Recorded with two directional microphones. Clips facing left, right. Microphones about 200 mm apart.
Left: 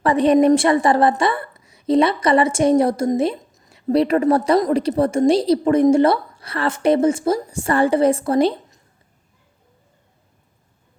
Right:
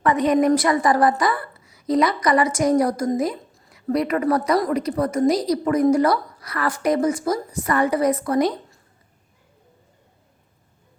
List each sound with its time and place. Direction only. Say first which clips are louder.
0.0 s a woman's voice: left 4 dB; 30° left (ahead or behind)